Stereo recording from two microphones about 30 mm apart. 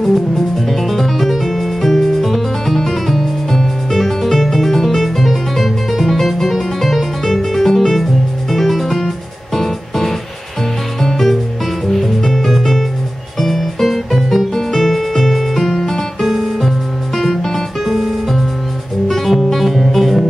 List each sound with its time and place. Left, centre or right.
0.7 s music: centre
15.7 s music: centre
16.3 s music: centre
17.2 s music: centre
19.0 s music: centre